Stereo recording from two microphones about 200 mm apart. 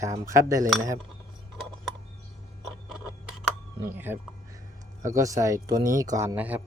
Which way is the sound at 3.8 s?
10° right (ahead or behind).